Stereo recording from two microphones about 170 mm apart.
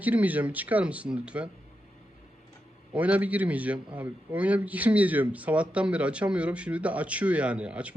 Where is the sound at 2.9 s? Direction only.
10° right (ahead or behind).